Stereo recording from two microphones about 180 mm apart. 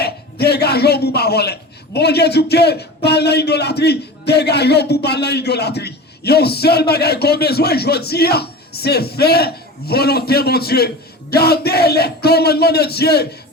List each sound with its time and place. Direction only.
0.0 s a man's voice: 65° left (ahead or behind)